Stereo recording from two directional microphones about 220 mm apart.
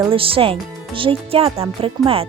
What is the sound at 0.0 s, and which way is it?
Speech, 25° right (ahead or behind).